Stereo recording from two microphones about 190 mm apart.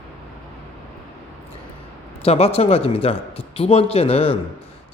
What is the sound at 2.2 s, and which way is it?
Speech, 30° left (ahead or behind).